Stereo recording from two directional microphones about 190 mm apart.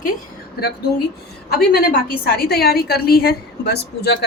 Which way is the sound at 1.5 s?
50° left (ahead or behind).